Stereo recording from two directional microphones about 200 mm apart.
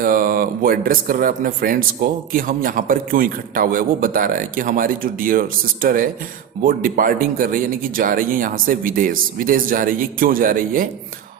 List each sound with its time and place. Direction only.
0.0 s speech: 45° right (ahead or behind)